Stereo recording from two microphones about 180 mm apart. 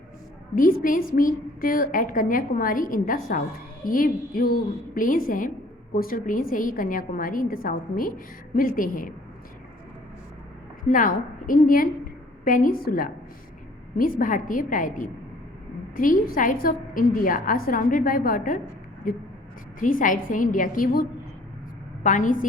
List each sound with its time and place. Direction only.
0.5 s a woman's voice: 50° left (ahead or behind)
10.8 s a woman's voice: 50° left (ahead or behind)
19.8 s a woman's voice: 50° left (ahead or behind)